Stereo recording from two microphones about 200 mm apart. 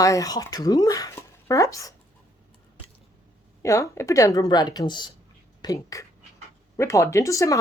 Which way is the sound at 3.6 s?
15° left (ahead or behind).